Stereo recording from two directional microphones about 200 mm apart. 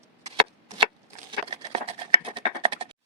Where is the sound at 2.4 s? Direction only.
25° right (ahead or behind).